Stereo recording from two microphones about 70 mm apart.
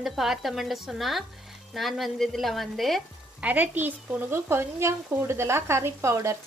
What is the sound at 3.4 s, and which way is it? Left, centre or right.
Speech, right.